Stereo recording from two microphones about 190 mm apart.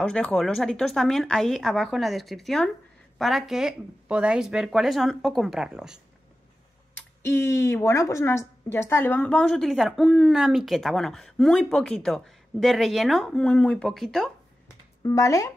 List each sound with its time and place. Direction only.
0.0 s speech: 5° left (ahead or behind)
7.0 s speech: 15° left (ahead or behind)
15.0 s speech: 15° left (ahead or behind)